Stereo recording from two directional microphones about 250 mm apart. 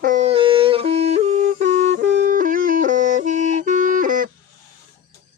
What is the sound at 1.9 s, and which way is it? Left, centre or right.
Music, right.